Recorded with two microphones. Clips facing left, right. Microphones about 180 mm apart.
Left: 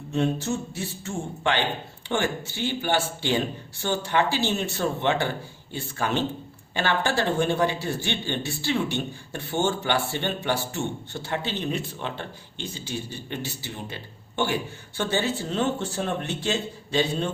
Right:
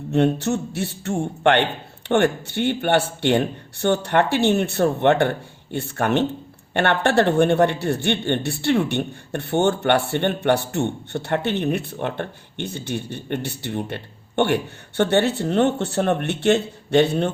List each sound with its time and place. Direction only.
0.1 s speech: 70° right (ahead or behind)